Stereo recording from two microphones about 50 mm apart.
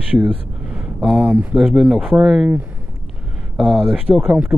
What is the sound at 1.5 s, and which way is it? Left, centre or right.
Speech, centre.